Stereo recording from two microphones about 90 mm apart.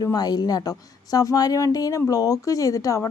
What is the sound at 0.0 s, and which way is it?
A woman's voice, 45° left (ahead or behind).